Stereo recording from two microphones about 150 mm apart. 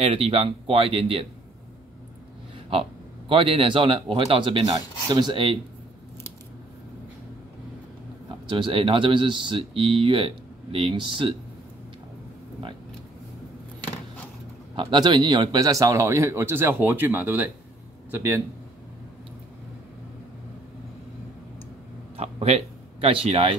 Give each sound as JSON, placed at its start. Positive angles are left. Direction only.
{"t": 0.0, "sound": "speech", "side_deg": -40}
{"t": 2.7, "sound": "speech", "side_deg": -35}
{"t": 8.5, "sound": "speech", "side_deg": -35}
{"t": 14.8, "sound": "a man's voice", "side_deg": -30}
{"t": 22.1, "sound": "a sound", "side_deg": -45}